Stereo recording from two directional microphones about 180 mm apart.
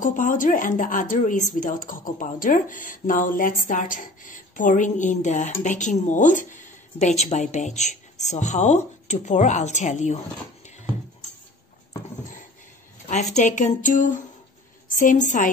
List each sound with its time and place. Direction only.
0.0 s speech: 45° left (ahead or behind)
12.2 s a sound: 45° left (ahead or behind)
13.1 s speech: 40° left (ahead or behind)